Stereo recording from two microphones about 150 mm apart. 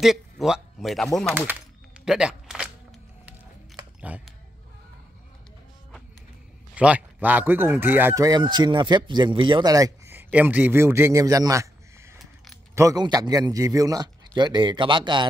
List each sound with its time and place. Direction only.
0.0 s a man's voice: centre (ahead or behind)
1.5 s a sound: 5° right (ahead or behind)
4.1 s speech: 10° right (ahead or behind)
6.7 s speech: 10° right (ahead or behind); by 15.2 s 30° right (ahead or behind)